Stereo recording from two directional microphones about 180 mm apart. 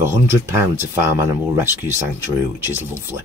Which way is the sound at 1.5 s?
10° right (ahead or behind).